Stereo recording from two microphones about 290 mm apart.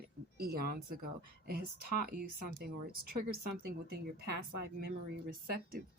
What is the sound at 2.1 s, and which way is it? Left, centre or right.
Speech, right.